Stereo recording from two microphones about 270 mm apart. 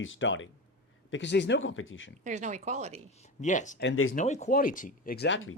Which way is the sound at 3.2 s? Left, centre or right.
Left.